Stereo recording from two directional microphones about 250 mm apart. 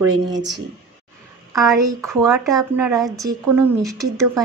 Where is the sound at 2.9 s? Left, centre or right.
Centre.